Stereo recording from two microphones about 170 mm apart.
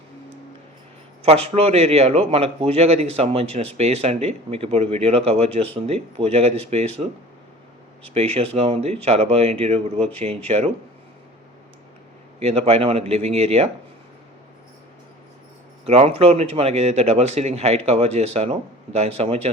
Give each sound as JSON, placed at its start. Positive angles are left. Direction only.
{"t": 1.2, "sound": "speech", "side_deg": -35}
{"t": 12.4, "sound": "speech", "side_deg": -35}
{"t": 15.9, "sound": "speech", "side_deg": -35}